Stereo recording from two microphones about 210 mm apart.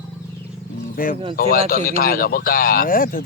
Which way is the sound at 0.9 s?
40° left (ahead or behind).